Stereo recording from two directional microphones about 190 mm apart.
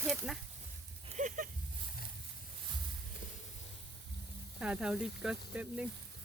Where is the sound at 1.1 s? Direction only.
45° right (ahead or behind).